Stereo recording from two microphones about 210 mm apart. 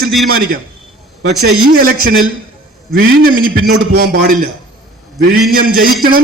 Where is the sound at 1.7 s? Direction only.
45° right (ahead or behind).